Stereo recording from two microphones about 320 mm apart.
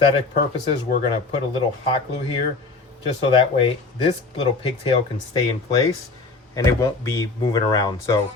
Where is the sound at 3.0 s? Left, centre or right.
Centre.